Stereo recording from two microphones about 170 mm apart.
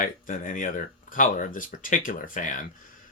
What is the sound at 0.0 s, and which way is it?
Speech, 50° left (ahead or behind).